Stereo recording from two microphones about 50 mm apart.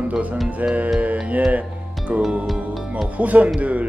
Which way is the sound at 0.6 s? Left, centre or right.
Right.